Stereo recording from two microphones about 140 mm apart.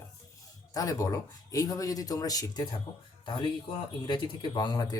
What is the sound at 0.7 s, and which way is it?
Speech, 25° left (ahead or behind).